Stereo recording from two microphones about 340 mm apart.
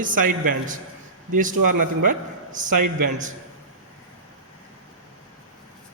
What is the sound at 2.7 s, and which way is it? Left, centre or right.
Speech, right.